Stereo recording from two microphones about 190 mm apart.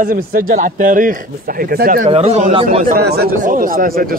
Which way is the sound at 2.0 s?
35° right (ahead or behind).